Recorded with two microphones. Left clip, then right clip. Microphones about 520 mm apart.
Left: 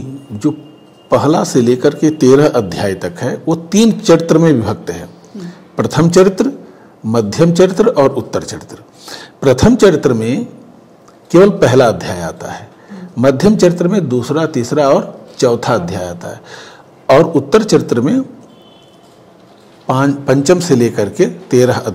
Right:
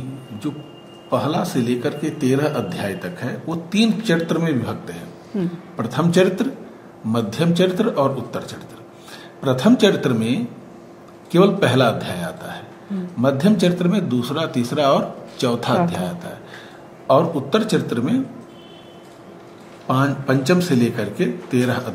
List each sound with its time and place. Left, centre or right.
1.1 s a man's voice: left
19.9 s a man's voice: left